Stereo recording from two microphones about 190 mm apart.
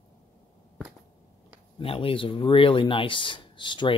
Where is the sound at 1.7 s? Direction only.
30° left (ahead or behind).